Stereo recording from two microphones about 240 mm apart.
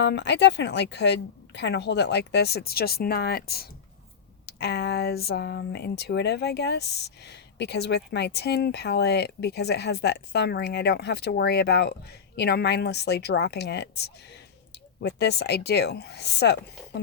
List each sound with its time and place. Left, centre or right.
0.0 s speech: left